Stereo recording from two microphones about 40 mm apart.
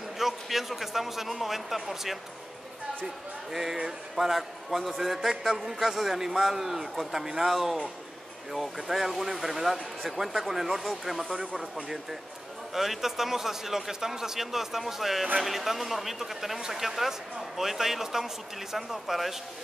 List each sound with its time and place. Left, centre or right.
0.2 s a man's voice: centre
4.2 s speech: centre
5.3 s a man's voice: centre
5.8 s a man's voice: centre